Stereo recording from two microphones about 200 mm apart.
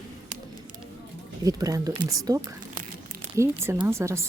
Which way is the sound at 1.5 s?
20° right (ahead or behind).